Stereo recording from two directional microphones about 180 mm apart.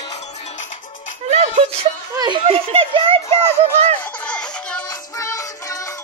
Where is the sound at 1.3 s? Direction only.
35° right (ahead or behind).